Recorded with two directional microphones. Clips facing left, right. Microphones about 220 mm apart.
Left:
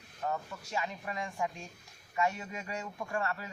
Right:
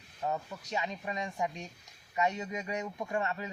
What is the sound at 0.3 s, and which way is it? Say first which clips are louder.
A man's voice: right 1 dB; 20° right (ahead or behind).